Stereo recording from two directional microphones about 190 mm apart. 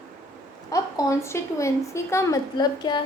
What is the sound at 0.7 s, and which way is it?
A woman's voice, 15° left (ahead or behind).